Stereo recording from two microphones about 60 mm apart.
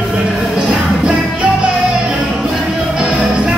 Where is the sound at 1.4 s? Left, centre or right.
Centre.